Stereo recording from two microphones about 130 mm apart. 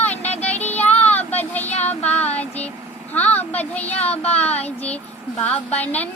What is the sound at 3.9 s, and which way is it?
Child singing, 55° left (ahead or behind).